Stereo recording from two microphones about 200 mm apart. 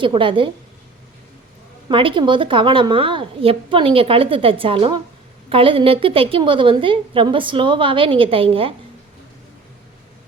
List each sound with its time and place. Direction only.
0.0 s a woman's voice: 25° right (ahead or behind)
1.9 s a woman's voice: 25° right (ahead or behind)